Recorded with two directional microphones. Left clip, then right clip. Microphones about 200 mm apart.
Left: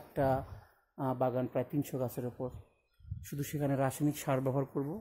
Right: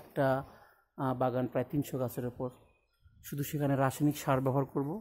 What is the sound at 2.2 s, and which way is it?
Speech, 15° right (ahead or behind).